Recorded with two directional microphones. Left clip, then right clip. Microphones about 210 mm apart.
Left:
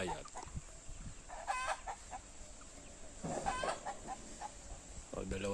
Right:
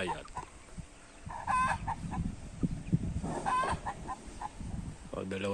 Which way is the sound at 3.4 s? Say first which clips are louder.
Right 8 dB; 45° left (ahead or behind).